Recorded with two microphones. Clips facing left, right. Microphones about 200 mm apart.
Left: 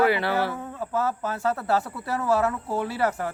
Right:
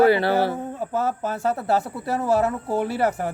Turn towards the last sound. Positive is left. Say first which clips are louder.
# right 3 dB
turn(degrees=-20)  # may be behind; listen again after turning